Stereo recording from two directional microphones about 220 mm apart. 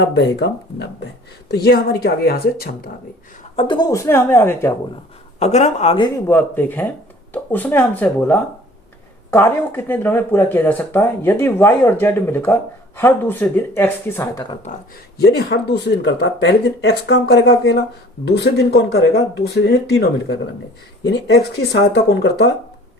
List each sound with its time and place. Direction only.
0.0 s speech: 50° left (ahead or behind)
3.5 s speech: 25° left (ahead or behind)
5.4 s speech: 30° left (ahead or behind)
6.2 s speech: 10° left (ahead or behind)
14.5 s speech: 30° left (ahead or behind)
15.2 s speech: 50° left (ahead or behind)